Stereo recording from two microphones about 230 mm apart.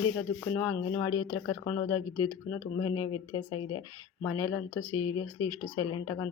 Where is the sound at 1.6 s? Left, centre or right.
Centre.